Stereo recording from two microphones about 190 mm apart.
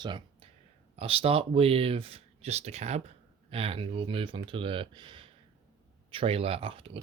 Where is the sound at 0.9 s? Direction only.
30° right (ahead or behind).